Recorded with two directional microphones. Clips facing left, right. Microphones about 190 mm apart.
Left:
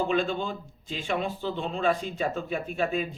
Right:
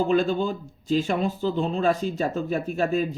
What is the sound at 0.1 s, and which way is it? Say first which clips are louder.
Speech: right 5 dB; 40° right (ahead or behind).